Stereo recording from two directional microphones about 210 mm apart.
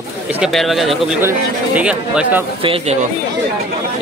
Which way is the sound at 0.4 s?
Centre (ahead or behind).